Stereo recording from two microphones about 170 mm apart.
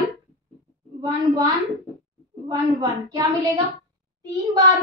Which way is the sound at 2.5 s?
20° right (ahead or behind).